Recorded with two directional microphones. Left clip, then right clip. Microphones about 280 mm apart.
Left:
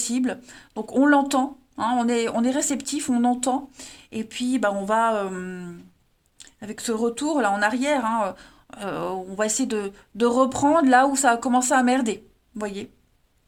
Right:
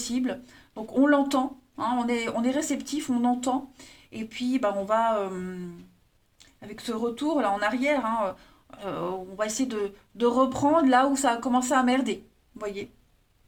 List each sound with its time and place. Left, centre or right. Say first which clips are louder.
0.1 s a woman's voice: left 4 dB; left